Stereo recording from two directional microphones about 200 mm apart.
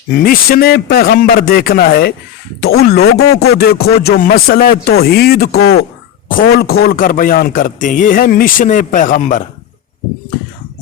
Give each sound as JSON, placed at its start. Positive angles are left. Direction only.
{"t": 0.2, "sound": "a man's voice", "side_deg": 50}